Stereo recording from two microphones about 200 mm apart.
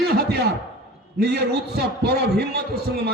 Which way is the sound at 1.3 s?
55° right (ahead or behind).